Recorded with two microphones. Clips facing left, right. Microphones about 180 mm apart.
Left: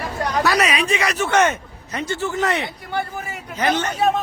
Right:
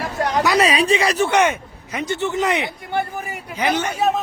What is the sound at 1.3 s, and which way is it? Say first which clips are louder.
Speech: even; 10° right (ahead or behind).